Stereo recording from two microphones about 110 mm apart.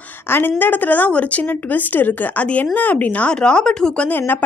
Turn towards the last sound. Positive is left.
turn(degrees=10)  # may be behind; listen again after turning